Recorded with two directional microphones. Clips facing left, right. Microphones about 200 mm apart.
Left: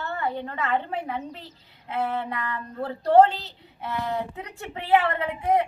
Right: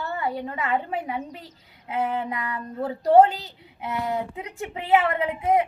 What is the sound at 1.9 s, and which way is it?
A woman's voice, 10° right (ahead or behind).